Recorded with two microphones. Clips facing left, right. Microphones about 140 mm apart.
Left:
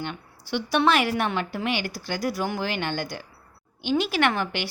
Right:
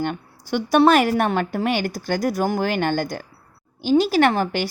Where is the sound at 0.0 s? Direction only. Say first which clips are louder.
Right 8 dB; 45° right (ahead or behind).